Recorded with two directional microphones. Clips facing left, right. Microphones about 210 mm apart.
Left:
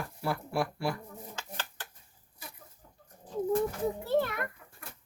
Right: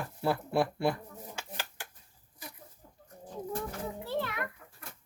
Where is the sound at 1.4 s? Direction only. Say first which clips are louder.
Even; 10° right (ahead or behind).